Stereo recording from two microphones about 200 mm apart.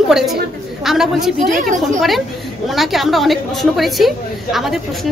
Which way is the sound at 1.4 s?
40° right (ahead or behind).